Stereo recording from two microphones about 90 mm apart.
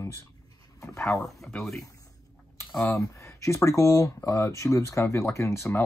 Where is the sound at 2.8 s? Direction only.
35° left (ahead or behind).